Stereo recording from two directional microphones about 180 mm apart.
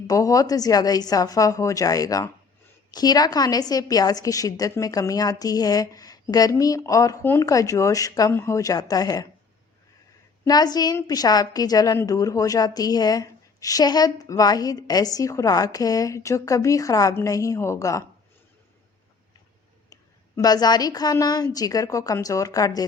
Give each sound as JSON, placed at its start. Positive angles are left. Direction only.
{"t": 0.1, "sound": "a woman's voice", "side_deg": 20}
{"t": 10.4, "sound": "a woman's voice", "side_deg": 20}
{"t": 19.9, "sound": "a woman's voice", "side_deg": 20}